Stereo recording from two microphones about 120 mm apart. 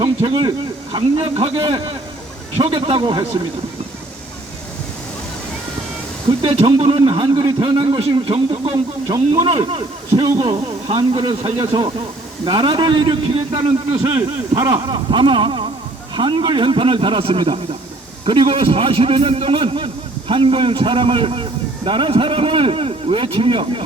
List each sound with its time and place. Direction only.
0.0 s a sound: 40° right (ahead or behind)
0.9 s a man's voice: 45° right (ahead or behind)
6.4 s a man's voice: 55° right (ahead or behind)
9.0 s a man's voice: 35° right (ahead or behind)
9.5 s a man's voice: 50° right (ahead or behind)
14.5 s a man's voice: 35° right (ahead or behind)